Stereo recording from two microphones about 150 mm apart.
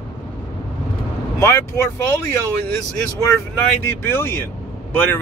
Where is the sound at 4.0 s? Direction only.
15° left (ahead or behind).